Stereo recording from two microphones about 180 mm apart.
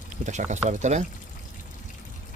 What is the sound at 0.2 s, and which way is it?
Speech, 40° right (ahead or behind).